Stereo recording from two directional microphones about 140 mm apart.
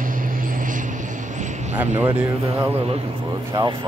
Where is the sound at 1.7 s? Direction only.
15° right (ahead or behind).